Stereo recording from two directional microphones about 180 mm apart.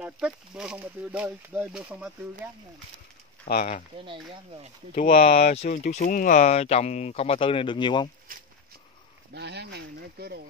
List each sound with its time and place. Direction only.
0.0 s speech: 5° right (ahead or behind)
3.5 s speech: 50° left (ahead or behind)
4.9 s speech: 40° left (ahead or behind)
9.3 s speech: 65° right (ahead or behind)